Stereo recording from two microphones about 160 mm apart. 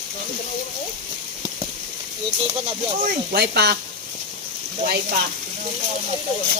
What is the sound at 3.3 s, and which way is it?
Speech, 90° right.